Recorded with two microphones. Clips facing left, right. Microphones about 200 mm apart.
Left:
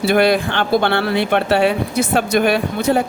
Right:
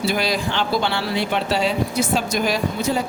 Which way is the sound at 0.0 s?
60° left (ahead or behind).